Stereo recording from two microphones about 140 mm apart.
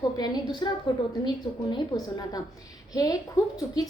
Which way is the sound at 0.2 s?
30° left (ahead or behind).